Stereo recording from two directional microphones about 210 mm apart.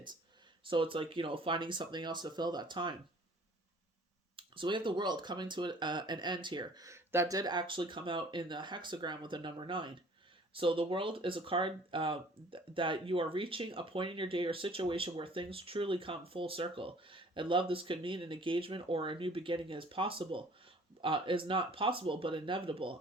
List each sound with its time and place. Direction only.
0.6 s speech: 25° right (ahead or behind)
4.4 s speech: 25° right (ahead or behind)